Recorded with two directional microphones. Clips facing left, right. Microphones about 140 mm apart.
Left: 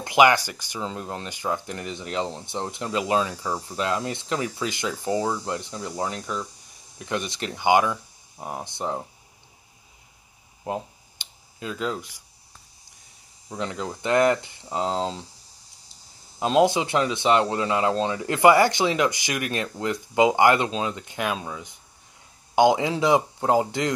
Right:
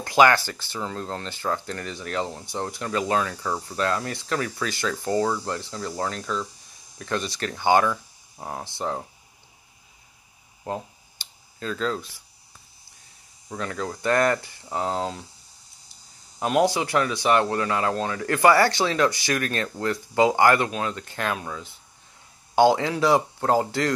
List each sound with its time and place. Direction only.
0.0 s speech: 15° left (ahead or behind)
10.6 s a sound: 15° left (ahead or behind)
13.6 s speech: 20° left (ahead or behind)
16.3 s speech: 20° left (ahead or behind)